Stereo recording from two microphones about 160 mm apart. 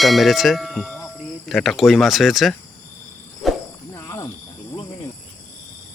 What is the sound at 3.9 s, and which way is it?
Snake, 20° left (ahead or behind).